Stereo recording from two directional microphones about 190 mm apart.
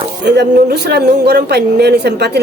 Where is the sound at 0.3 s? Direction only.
60° right (ahead or behind).